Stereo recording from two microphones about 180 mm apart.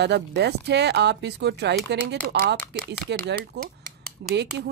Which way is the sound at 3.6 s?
65° right (ahead or behind).